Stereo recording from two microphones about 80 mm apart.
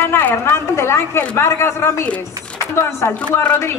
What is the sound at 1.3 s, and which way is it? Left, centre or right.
Speech, left.